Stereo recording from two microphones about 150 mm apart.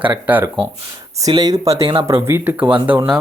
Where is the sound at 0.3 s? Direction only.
10° right (ahead or behind).